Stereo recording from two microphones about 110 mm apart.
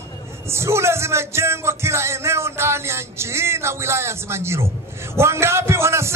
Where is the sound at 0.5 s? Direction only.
25° right (ahead or behind).